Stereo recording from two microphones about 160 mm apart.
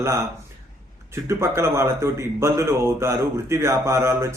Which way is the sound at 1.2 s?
15° right (ahead or behind).